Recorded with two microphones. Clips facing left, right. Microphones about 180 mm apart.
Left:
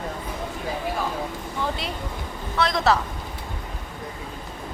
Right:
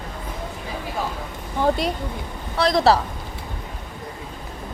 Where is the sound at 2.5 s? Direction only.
35° right (ahead or behind).